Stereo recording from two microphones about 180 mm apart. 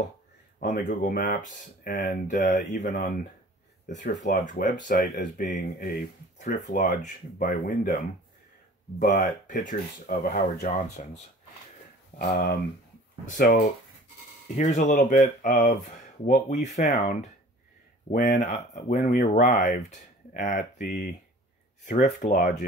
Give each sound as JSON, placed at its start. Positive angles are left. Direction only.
{"t": 0.6, "sound": "speech", "side_deg": 50}
{"t": 9.0, "sound": "speech", "side_deg": 45}